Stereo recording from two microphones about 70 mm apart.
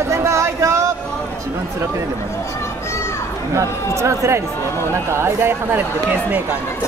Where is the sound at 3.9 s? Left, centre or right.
Right.